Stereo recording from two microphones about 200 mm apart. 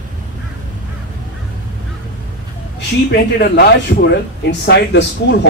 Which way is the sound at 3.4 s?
50° left (ahead or behind).